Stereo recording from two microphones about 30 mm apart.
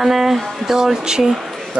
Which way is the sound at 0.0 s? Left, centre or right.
Centre.